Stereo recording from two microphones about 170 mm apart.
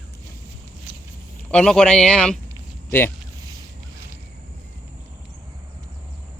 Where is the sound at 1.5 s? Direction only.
5° left (ahead or behind).